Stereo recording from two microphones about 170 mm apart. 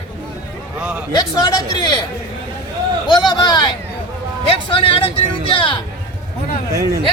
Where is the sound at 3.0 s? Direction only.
25° left (ahead or behind).